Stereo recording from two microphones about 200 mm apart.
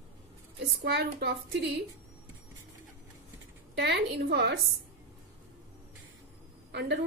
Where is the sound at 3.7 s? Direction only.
60° right (ahead or behind).